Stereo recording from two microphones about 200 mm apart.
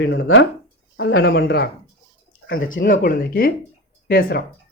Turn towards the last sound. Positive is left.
turn(degrees=55)  # may be behind; listen again after turning